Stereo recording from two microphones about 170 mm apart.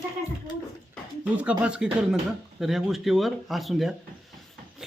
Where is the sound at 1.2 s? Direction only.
5° right (ahead or behind).